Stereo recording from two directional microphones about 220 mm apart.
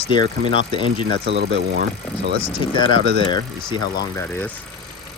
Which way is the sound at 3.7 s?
15° left (ahead or behind).